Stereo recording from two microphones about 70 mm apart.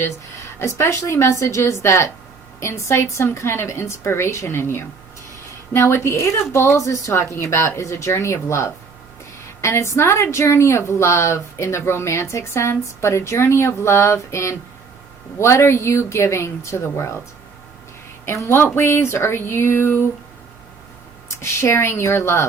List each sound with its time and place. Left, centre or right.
0.6 s a woman's voice: left
18.4 s a woman's voice: left
21.2 s a woman's voice: left